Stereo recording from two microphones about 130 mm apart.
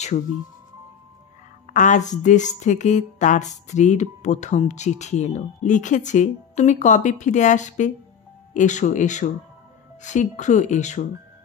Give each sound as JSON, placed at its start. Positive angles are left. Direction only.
{"t": 1.7, "sound": "a woman's voice", "side_deg": 70}